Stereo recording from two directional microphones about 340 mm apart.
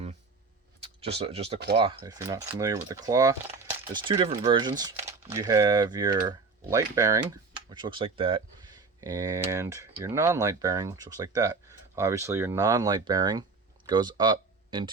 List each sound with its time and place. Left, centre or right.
1.2 s speech: centre